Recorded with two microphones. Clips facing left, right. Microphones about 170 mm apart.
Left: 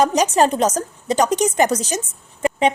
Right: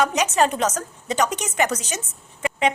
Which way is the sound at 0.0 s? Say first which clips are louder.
Left 4 dB; 35° left (ahead or behind).